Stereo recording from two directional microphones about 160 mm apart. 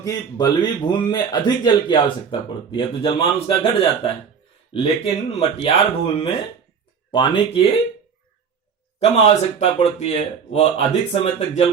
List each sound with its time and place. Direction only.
0.0 s speech: 25° left (ahead or behind)
7.1 s speech: 30° left (ahead or behind)
9.0 s speech: 40° left (ahead or behind)